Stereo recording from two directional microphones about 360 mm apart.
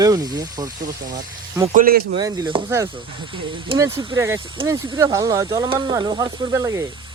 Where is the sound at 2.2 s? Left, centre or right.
Centre.